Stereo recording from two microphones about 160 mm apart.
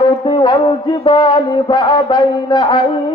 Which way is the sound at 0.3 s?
30° left (ahead or behind).